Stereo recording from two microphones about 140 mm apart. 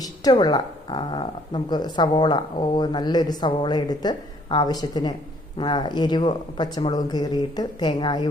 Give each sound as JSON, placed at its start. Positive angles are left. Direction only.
{"t": 0.0, "sound": "speech", "side_deg": 30}